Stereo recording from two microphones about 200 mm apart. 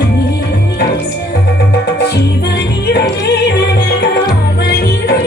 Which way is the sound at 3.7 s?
55° left (ahead or behind).